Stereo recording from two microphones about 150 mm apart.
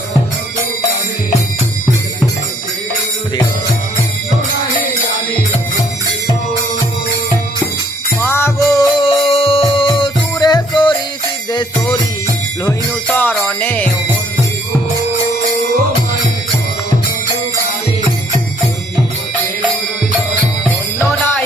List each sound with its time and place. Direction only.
8.2 s music: 15° left (ahead or behind)
9.0 s music: 35° left (ahead or behind)
13.1 s music: 15° left (ahead or behind)
13.6 s jingle bell: 10° left (ahead or behind)